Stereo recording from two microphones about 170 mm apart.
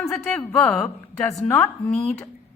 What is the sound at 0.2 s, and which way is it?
A woman's voice, 5° left (ahead or behind).